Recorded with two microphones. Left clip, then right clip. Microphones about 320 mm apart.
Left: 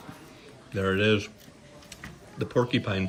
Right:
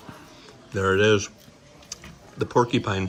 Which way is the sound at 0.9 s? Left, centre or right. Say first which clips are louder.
Right 5 dB; centre.